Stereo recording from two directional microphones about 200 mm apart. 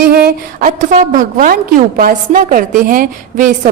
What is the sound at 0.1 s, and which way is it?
A woman's voice, 50° right (ahead or behind).